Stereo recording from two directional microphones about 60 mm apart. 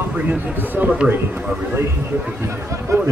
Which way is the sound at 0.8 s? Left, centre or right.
Right.